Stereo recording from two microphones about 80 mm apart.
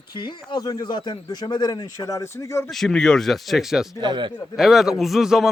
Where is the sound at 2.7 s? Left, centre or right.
Centre.